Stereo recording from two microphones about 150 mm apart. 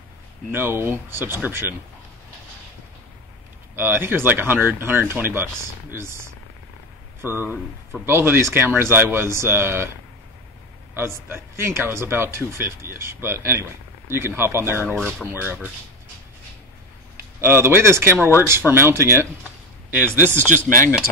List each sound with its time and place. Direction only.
0.5 s speech: 15° right (ahead or behind)
3.7 s speech: 15° right (ahead or behind)
11.0 s speech: 15° right (ahead or behind)
15.0 s speech: 5° left (ahead or behind)
15.2 s speech: 15° right (ahead or behind)
17.4 s speech: 15° right (ahead or behind)